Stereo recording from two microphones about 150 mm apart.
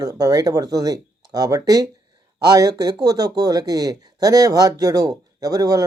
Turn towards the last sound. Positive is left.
turn(degrees=-25)  # may be behind; listen again after turning